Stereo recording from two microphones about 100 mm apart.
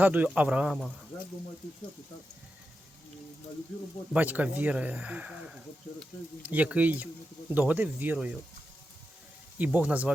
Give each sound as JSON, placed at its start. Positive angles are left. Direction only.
{"t": 0.0, "sound": "speech", "side_deg": -15}
{"t": 4.1, "sound": "speech", "side_deg": -15}
{"t": 9.6, "sound": "speech", "side_deg": -15}